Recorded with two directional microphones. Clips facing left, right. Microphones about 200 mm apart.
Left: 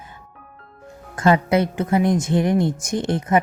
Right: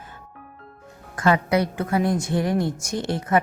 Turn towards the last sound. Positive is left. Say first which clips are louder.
# left 3 dB
turn(degrees=20)  # may be behind; listen again after turning